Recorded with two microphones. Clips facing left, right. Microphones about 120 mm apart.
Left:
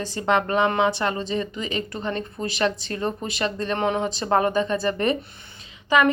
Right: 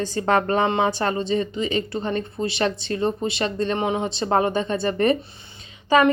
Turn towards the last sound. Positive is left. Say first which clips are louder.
# right 2 dB
turn(degrees=-30)  # may be behind; listen again after turning